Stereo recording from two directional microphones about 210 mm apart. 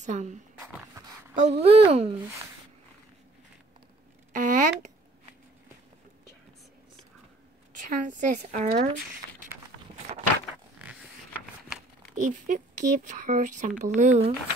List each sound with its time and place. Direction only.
0.0 s speech: 35° right (ahead or behind)
4.3 s a sound: 40° right (ahead or behind)
7.7 s a woman's voice: 35° right (ahead or behind)
12.2 s speech: 35° right (ahead or behind)